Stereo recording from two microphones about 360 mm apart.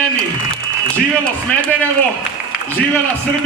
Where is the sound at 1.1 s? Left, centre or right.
Centre.